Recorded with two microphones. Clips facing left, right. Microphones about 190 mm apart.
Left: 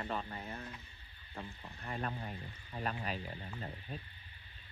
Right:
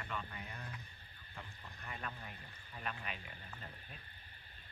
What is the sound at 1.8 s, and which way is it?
Speech, 40° left (ahead or behind).